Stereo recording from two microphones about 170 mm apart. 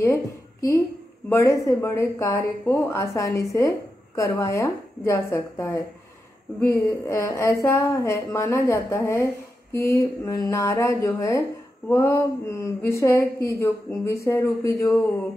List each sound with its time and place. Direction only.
0.0 s a woman's voice: 15° left (ahead or behind)